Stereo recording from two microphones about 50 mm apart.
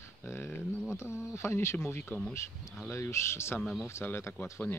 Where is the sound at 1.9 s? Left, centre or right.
Left.